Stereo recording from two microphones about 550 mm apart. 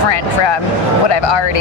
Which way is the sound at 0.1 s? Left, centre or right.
Left.